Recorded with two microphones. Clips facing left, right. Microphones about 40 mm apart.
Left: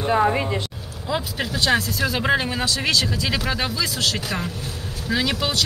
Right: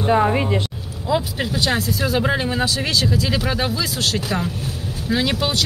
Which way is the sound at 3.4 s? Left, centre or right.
Centre.